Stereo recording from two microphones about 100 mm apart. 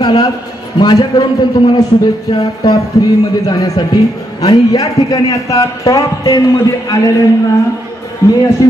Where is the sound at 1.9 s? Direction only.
55° left (ahead or behind).